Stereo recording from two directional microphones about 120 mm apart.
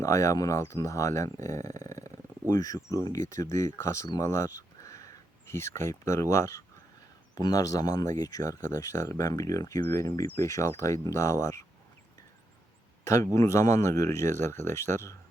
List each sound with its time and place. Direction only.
0.0 s speech: 25° left (ahead or behind)
13.3 s speech: 25° left (ahead or behind)